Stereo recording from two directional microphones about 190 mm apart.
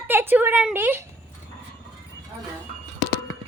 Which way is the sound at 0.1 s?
10° right (ahead or behind).